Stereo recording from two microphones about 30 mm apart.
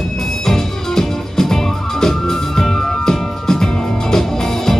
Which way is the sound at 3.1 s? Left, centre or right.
Centre.